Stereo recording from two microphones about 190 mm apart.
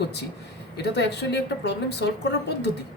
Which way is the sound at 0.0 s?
60° left (ahead or behind).